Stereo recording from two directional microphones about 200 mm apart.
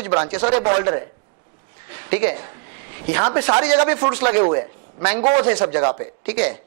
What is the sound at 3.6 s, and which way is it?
A woman's voice, 10° right (ahead or behind).